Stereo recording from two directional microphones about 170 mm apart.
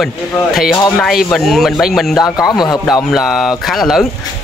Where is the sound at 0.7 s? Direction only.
15° left (ahead or behind).